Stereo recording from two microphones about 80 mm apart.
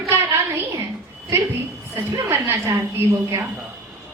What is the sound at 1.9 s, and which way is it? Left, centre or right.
Speech, right.